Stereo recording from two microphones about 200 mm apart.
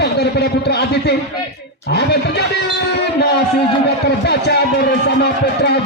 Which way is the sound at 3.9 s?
55° left (ahead or behind).